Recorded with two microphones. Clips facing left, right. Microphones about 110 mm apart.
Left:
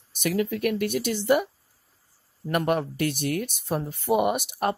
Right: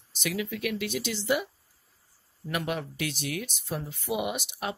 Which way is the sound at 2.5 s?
50° left (ahead or behind).